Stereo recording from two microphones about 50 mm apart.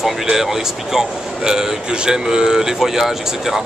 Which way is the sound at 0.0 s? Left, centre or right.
Centre.